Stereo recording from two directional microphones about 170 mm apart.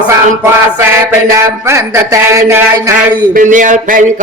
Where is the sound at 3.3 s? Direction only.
50° right (ahead or behind).